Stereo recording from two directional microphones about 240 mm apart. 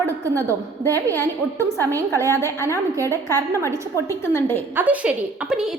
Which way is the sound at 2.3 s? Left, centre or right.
Centre.